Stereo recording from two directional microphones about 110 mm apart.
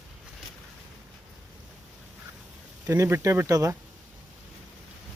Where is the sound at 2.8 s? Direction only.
25° right (ahead or behind).